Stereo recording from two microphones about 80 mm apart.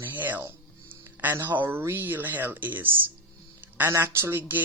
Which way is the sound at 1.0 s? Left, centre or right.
Right.